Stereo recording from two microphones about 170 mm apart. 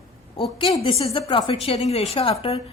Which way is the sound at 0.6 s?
30° left (ahead or behind).